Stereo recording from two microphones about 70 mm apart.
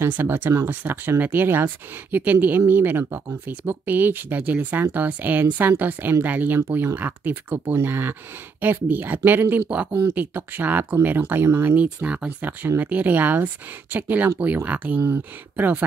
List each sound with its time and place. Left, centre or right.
0.0 s speech: right